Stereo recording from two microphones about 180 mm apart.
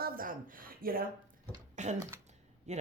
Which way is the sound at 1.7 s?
40° right (ahead or behind).